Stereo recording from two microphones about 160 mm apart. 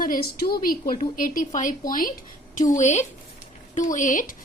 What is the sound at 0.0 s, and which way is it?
A woman's voice, 65° left (ahead or behind).